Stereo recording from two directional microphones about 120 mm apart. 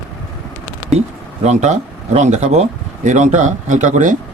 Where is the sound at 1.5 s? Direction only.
80° right.